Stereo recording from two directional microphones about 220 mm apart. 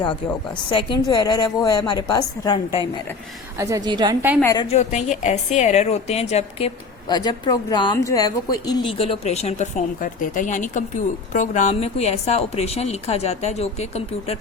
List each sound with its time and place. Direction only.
0.7 s a woman's voice: 20° left (ahead or behind)
3.6 s a woman's voice: 15° right (ahead or behind)
4.5 s a woman's voice: 30° left (ahead or behind)